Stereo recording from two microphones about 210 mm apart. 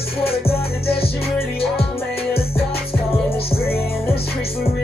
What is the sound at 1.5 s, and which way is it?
Music, 25° left (ahead or behind).